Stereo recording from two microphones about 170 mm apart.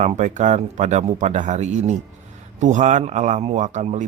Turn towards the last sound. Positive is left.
turn(degrees=-45)  # may be behind; listen again after turning